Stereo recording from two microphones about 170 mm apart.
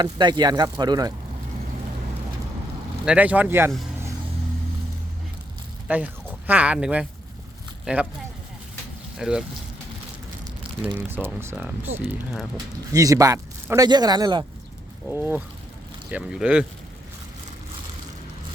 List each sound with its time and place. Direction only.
0.0 s speech: 25° right (ahead or behind)
3.1 s speech: 10° right (ahead or behind)
5.9 s speech: 10° right (ahead or behind)
9.1 s speech: 5° right (ahead or behind)
10.9 s speech: 10° right (ahead or behind)
12.9 s speech: 20° right (ahead or behind)
15.1 s speech: 10° right (ahead or behind)